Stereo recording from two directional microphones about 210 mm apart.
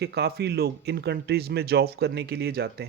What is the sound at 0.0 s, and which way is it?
Speech, 50° right (ahead or behind).